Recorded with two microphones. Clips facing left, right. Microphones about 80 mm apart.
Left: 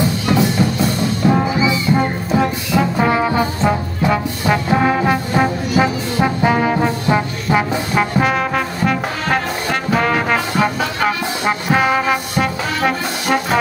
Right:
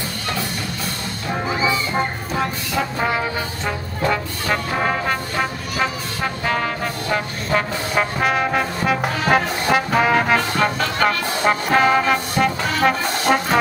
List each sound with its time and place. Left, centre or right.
0.3 s music: centre
2.3 s music: centre
3.1 s brass instrument: left
4.1 s brass instrument: centre
7.9 s brass instrument: centre